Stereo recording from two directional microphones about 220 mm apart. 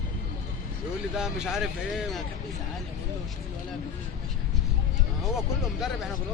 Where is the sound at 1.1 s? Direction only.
5° right (ahead or behind).